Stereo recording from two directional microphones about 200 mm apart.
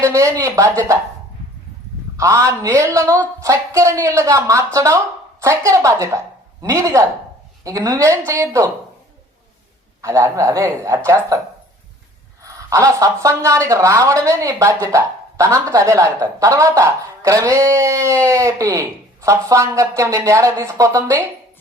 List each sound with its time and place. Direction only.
0.0 s speech: 15° right (ahead or behind)
2.1 s speech: 15° right (ahead or behind)
10.0 s speech: 15° right (ahead or behind)
12.4 s speech: 15° right (ahead or behind)